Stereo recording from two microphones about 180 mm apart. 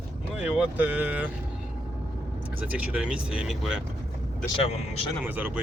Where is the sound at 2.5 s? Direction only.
10° right (ahead or behind).